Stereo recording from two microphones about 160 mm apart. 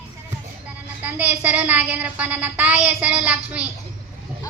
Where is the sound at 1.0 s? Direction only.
10° right (ahead or behind).